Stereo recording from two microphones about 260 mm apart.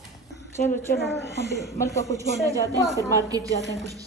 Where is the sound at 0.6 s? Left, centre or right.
Left.